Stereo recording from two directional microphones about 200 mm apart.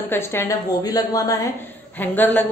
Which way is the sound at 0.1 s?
10° left (ahead or behind).